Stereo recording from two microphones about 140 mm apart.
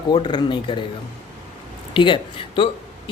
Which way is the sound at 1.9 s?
35° left (ahead or behind).